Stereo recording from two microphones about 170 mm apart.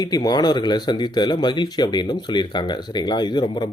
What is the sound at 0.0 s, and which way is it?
Speech, 25° left (ahead or behind).